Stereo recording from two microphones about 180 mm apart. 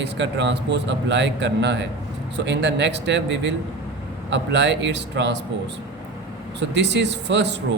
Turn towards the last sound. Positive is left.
turn(degrees=-75)  # may be behind; listen again after turning